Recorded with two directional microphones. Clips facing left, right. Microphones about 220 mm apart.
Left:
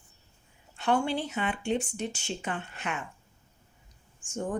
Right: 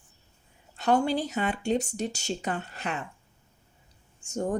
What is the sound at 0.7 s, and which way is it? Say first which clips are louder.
Speech: right 3 dB; 40° right (ahead or behind).